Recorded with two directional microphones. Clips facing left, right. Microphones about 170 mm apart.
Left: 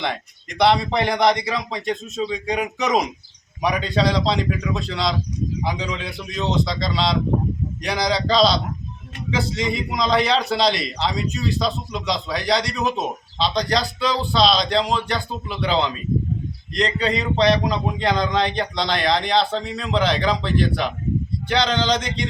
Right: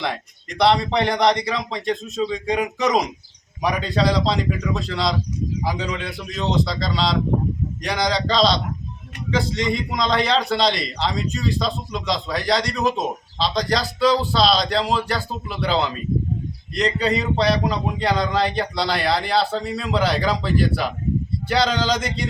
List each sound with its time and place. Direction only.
0.6 s a man's voice: centre (ahead or behind)